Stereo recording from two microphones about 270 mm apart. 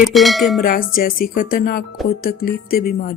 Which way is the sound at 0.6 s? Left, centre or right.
Left.